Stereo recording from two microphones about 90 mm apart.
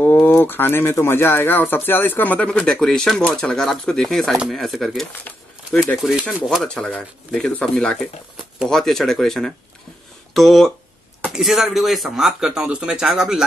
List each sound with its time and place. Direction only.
0.0 s speech: 25° left (ahead or behind); by 13.4 s 5° right (ahead or behind)